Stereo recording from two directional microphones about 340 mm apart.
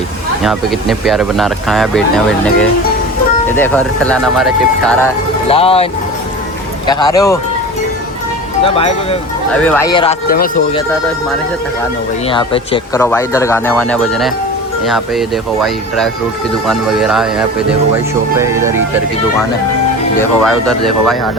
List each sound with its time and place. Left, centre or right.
0.4 s speech: centre
5.5 s speech: centre
8.6 s speech: centre
9.5 s speech: centre
10.2 s speech: left
12.3 s speech: centre
20.1 s speech: centre